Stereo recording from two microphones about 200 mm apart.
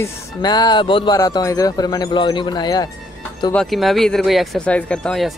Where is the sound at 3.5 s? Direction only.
Centre (ahead or behind).